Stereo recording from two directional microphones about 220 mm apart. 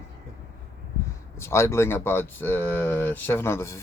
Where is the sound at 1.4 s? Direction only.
10° left (ahead or behind).